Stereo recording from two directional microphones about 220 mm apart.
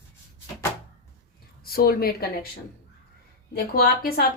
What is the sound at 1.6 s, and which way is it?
Speech, 45° left (ahead or behind).